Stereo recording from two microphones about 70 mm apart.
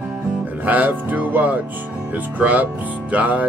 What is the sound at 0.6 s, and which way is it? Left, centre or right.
Speech, right.